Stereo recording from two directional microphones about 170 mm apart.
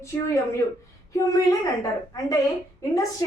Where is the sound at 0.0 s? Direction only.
15° left (ahead or behind).